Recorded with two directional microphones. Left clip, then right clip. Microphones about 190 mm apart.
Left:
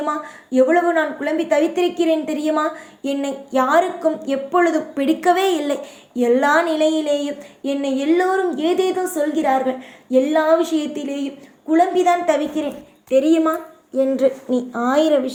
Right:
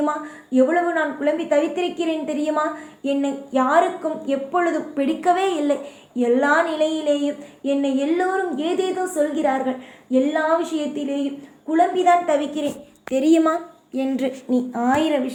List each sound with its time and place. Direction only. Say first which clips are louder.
0.0 s a woman's voice: even; 35° left (ahead or behind)
13.3 s a woman's voice: even; centre (ahead or behind)
14.5 s speech: left 1 dB; 15° left (ahead or behind)